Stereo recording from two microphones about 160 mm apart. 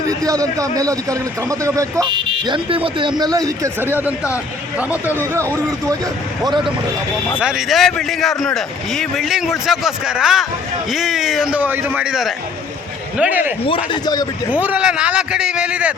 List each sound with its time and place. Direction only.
0.1 s speech: 20° right (ahead or behind)
2.0 s a man's voice: 30° right (ahead or behind); by 5.1 s 10° right (ahead or behind)
6.4 s speech: 30° right (ahead or behind)
7.4 s a man's voice: centre (ahead or behind)
13.7 s a man's voice: 30° left (ahead or behind)
14.5 s a man's voice: 10° right (ahead or behind)